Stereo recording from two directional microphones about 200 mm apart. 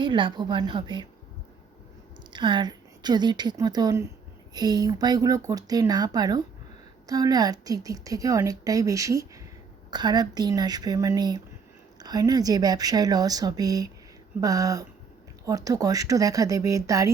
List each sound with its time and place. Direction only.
0.0 s speech: 25° right (ahead or behind)
2.3 s speech: 20° right (ahead or behind)